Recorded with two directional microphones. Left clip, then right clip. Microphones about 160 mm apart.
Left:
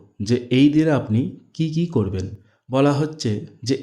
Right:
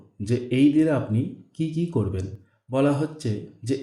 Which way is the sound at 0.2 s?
30° left (ahead or behind).